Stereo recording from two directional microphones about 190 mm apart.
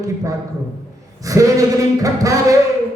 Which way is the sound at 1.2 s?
15° right (ahead or behind).